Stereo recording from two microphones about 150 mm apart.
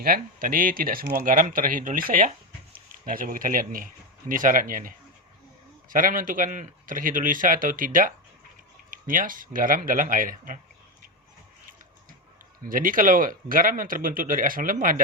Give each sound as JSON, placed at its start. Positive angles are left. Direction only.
{"t": 0.0, "sound": "speech", "side_deg": -75}
{"t": 12.6, "sound": "speech", "side_deg": -70}